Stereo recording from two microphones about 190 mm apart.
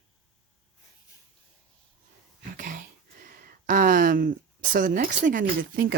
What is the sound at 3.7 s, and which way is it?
Speech, 45° right (ahead or behind).